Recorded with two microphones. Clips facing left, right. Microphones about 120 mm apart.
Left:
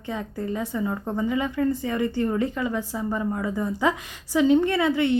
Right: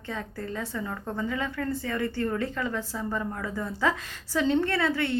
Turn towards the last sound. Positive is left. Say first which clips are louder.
# left 5 dB
turn(degrees=15)  # may be behind; listen again after turning